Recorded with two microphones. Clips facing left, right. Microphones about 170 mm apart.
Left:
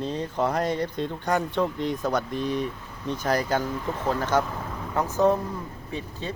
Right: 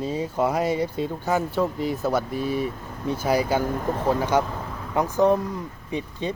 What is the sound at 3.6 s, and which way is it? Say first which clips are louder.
Speech: right 4 dB; 50° right (ahead or behind).